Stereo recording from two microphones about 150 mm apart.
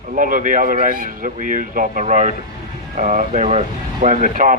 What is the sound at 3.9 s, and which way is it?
Speech, 60° right (ahead or behind).